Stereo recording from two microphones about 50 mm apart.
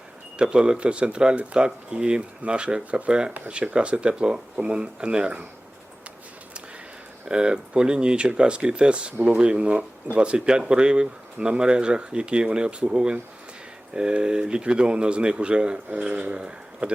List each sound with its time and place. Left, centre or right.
0.3 s speech: centre
7.3 s speech: centre